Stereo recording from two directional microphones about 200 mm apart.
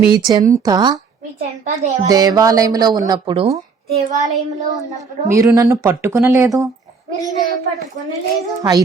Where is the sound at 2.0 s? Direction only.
20° right (ahead or behind).